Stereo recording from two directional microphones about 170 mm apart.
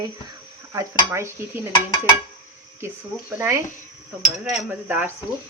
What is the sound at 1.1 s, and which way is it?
Speech, 15° right (ahead or behind).